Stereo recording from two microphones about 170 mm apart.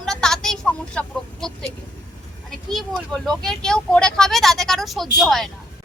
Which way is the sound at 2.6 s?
Centre (ahead or behind).